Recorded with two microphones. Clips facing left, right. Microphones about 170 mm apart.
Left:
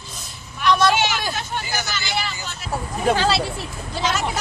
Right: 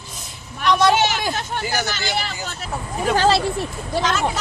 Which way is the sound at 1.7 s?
50° right (ahead or behind).